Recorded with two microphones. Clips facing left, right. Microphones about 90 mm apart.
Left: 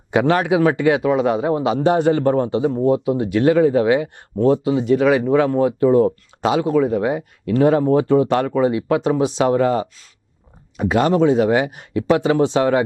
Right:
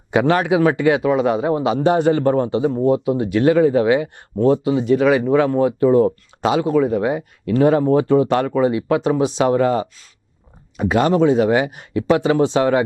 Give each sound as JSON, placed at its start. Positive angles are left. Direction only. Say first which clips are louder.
{"t": 0.1, "sound": "speech", "louder": "even", "side_deg": -15}